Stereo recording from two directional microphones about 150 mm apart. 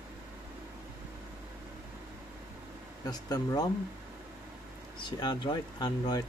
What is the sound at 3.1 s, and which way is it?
Speech, 25° left (ahead or behind).